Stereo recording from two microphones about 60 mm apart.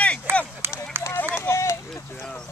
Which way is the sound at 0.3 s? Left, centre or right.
Right.